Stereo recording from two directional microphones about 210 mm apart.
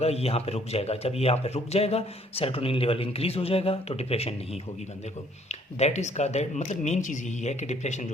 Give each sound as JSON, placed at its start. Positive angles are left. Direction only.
{"t": 0.0, "sound": "a man's voice", "side_deg": 30}
{"t": 5.5, "sound": "speech", "side_deg": 30}